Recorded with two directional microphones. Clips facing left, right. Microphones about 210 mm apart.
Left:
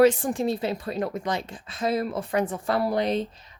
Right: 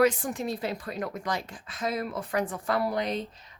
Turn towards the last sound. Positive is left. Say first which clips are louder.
# left 4 dB
turn(degrees=30)  # may be behind; listen again after turning